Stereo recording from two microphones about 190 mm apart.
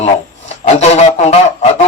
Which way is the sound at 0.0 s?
35° left (ahead or behind).